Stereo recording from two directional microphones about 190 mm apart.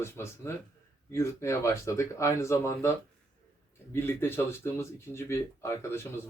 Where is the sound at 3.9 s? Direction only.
10° left (ahead or behind).